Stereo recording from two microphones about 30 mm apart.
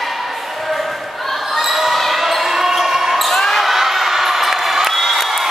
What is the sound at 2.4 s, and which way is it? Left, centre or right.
Basketball bounce, centre.